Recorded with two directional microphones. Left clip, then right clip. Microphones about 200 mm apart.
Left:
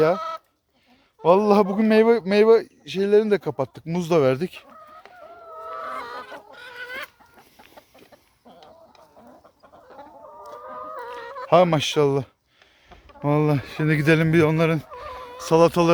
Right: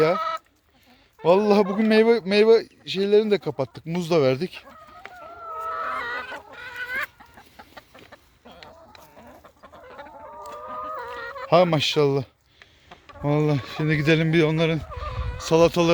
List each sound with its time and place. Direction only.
0.2 s chicken: 35° left (ahead or behind)
1.2 s speech: centre (ahead or behind)
5.7 s chicken: 35° left (ahead or behind)
6.2 s chicken: 45° left (ahead or behind)
7.3 s chicken: centre (ahead or behind)
10.9 s fowl: 35° left (ahead or behind)
11.4 s speech: centre (ahead or behind)